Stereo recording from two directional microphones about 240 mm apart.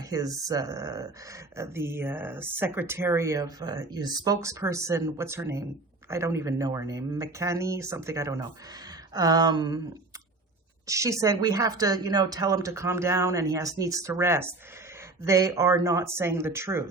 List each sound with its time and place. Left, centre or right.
0.1 s speech: centre
10.8 s speech: centre